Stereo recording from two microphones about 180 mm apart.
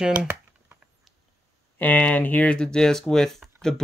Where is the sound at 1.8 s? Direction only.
10° left (ahead or behind).